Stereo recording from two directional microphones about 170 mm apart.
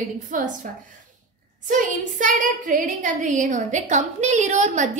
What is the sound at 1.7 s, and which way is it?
A woman's voice, 50° right (ahead or behind).